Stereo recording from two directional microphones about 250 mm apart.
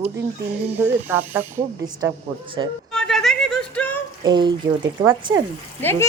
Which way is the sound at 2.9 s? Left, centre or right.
Centre.